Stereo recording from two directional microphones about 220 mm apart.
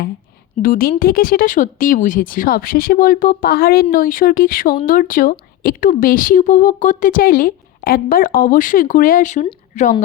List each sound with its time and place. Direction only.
0.6 s speech: 40° left (ahead or behind)